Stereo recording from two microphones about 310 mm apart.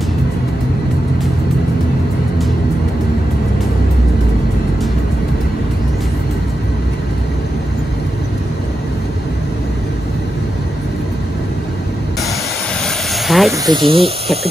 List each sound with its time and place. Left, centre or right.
12.8 s vehicle: centre
13.7 s speech: centre